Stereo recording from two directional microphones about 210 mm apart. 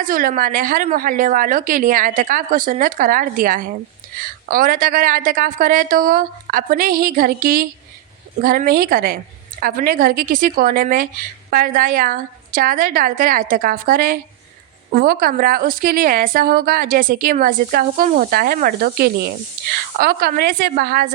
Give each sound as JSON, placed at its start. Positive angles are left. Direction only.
{"t": 0.0, "sound": "a woman's voice", "side_deg": -40}